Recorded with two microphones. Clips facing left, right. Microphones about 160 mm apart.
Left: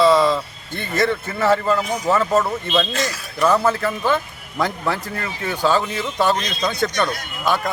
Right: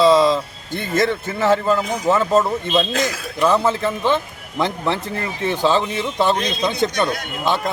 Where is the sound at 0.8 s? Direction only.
25° right (ahead or behind).